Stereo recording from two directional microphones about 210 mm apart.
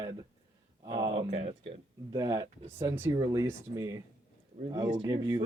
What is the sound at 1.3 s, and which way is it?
Speech, 30° right (ahead or behind).